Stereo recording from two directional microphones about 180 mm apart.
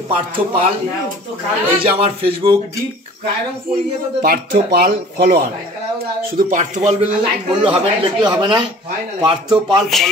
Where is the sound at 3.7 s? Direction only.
55° right (ahead or behind).